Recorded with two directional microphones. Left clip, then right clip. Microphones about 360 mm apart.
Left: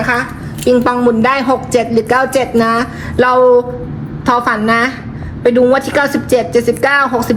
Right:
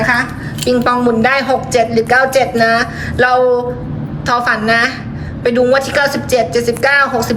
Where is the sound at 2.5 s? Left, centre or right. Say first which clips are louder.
Right 1 dB; centre.